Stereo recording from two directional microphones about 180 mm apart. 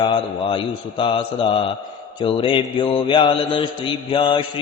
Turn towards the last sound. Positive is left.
turn(degrees=25)  # may be behind; listen again after turning